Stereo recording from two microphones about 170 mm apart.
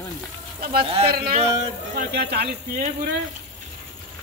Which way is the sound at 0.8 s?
35° right (ahead or behind).